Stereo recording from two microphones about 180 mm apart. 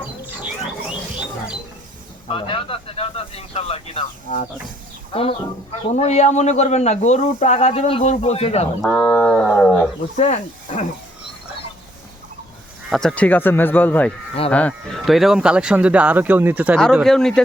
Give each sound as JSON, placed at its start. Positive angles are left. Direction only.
{"t": 0.4, "sound": "a sound", "side_deg": -5}
{"t": 2.2, "sound": "speech", "side_deg": 30}
{"t": 9.0, "sound": "speech", "side_deg": 5}
{"t": 10.2, "sound": "speech", "side_deg": 35}
{"t": 12.9, "sound": "speech", "side_deg": 5}
{"t": 16.7, "sound": "speech", "side_deg": 0}